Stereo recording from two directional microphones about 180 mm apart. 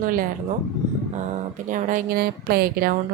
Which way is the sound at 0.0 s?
50° right (ahead or behind).